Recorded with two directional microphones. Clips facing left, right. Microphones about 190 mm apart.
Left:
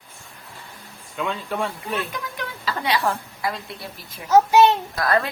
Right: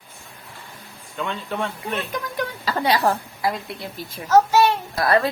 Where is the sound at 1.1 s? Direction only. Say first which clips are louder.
Left 1 dB; centre (ahead or behind).